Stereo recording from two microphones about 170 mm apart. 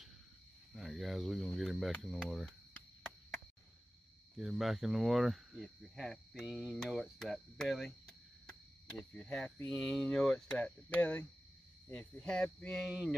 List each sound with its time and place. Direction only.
0.7 s speech: centre (ahead or behind)
4.4 s speech: centre (ahead or behind)
12.8 s speech: 5° right (ahead or behind)